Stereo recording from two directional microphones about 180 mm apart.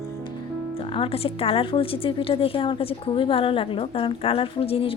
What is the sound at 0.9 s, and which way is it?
A woman's voice, 30° left (ahead or behind).